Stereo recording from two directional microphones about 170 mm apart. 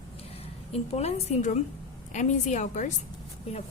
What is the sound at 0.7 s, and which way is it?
A woman's voice, 40° left (ahead or behind).